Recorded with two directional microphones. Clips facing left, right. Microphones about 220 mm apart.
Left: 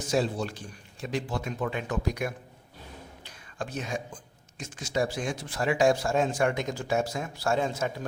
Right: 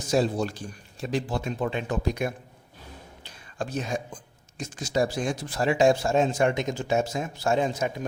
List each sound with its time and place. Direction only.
0.1 s a man's voice: 40° right (ahead or behind)
3.2 s a sound: 35° right (ahead or behind)
4.5 s speech: 35° right (ahead or behind); by 8.0 s 15° right (ahead or behind)